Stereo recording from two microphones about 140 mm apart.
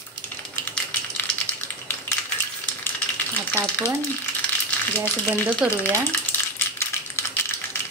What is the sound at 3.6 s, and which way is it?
Speech, 15° left (ahead or behind).